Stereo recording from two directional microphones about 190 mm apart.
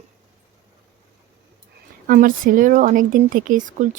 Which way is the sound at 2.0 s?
50° right (ahead or behind).